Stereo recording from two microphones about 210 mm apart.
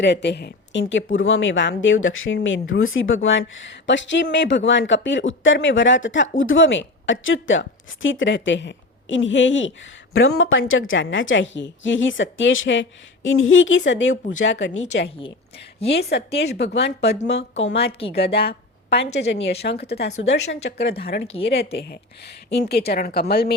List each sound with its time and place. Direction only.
0.0 s speech: 55° left (ahead or behind)